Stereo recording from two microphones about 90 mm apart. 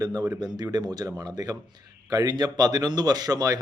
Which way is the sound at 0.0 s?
45° right (ahead or behind).